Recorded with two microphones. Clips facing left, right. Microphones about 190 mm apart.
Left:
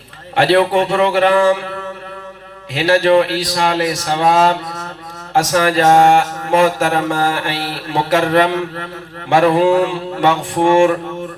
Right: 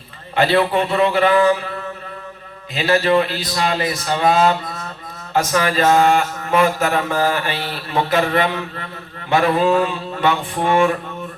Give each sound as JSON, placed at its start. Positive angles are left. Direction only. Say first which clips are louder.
{"t": 0.3, "sound": "speech", "louder": "left 4 dB", "side_deg": 85}
{"t": 2.7, "sound": "speech", "louder": "left 4 dB", "side_deg": 80}
{"t": 5.3, "sound": "mantra", "louder": "left 4 dB", "side_deg": 85}
{"t": 9.3, "sound": "mantra", "louder": "left 4 dB", "side_deg": 90}